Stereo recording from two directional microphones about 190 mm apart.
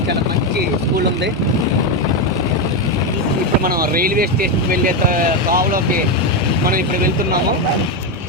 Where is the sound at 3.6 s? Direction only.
50° right (ahead or behind).